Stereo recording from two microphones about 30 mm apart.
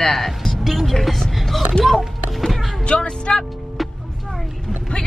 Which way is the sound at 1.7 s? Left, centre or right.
Left.